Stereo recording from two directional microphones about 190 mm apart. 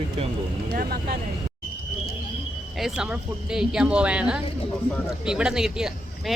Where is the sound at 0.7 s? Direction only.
55° right (ahead or behind).